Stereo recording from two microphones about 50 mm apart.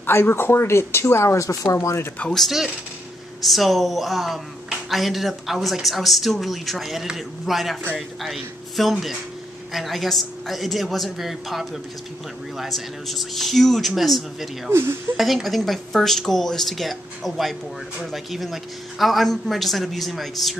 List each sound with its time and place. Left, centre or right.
0.0 s speech: left
3.4 s a man's voice: centre
14.7 s speech: right
15.1 s speech: centre